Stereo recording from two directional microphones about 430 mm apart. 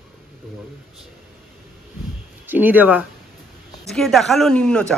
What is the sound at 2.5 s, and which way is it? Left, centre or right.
Speech, centre.